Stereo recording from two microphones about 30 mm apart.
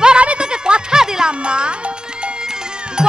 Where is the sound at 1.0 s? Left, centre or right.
Centre.